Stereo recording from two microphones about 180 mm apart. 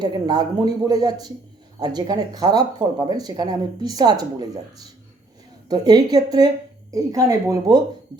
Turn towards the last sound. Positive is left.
turn(degrees=-20)  # may be behind; listen again after turning